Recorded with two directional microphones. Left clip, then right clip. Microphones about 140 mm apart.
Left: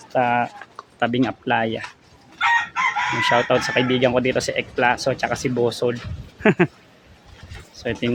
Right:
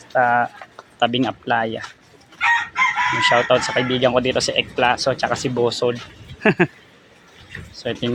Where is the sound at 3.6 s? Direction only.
45° left (ahead or behind); by 4.9 s 20° left (ahead or behind).